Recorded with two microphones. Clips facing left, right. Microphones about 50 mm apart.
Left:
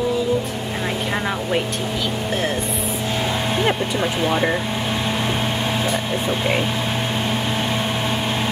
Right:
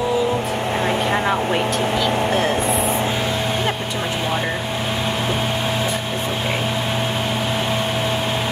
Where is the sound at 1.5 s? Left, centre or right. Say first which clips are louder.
Right 3 dB; centre.